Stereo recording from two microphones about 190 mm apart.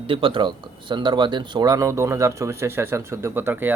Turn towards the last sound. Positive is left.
turn(degrees=-10)  # may be behind; listen again after turning